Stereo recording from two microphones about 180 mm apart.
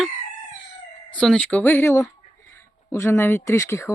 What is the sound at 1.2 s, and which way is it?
Speech, 5° left (ahead or behind).